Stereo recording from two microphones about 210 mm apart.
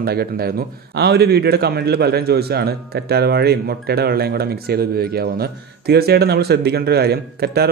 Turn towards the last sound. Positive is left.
turn(degrees=-50)  # may be behind; listen again after turning